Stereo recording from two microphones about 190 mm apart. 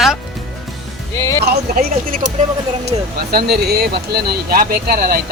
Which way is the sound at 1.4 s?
50° right (ahead or behind).